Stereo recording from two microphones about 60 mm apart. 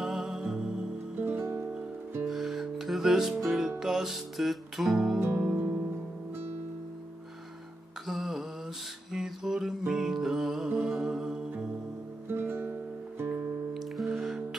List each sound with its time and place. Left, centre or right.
0.0 s music: centre
1.1 s music: right
2.2 s music: centre
5.3 s music: right
8.1 s music: centre
10.7 s music: centre
11.0 s humming: centre
12.3 s guitar: right
13.7 s music: centre